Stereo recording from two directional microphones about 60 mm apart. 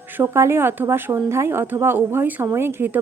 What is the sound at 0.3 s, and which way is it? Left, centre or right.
A woman's voice, right.